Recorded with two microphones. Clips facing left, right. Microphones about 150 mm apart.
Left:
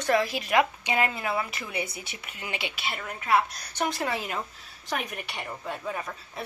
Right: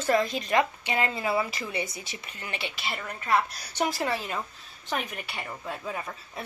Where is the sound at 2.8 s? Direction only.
Centre (ahead or behind).